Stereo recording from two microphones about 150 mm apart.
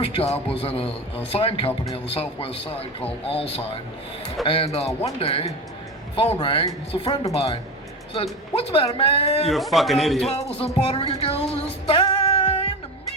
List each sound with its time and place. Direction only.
0.0 s a man's voice: 40° left (ahead or behind)
9.5 s a man's voice: centre (ahead or behind)
10.2 s a man's voice: 40° left (ahead or behind)
10.8 s music: 40° left (ahead or behind)